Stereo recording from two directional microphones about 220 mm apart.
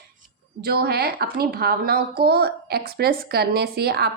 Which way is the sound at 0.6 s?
45° right (ahead or behind).